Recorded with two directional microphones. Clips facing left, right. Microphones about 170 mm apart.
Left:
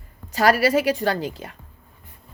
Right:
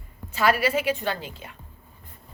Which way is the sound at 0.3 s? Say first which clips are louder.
Left 5 dB; 40° left (ahead or behind).